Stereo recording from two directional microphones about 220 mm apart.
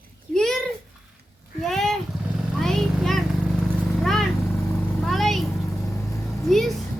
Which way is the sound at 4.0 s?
Centre (ahead or behind).